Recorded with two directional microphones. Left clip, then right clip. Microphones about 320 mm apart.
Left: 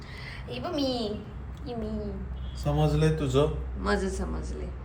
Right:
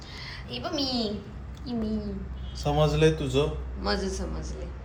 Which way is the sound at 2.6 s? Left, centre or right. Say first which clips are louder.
Right 4 dB; centre.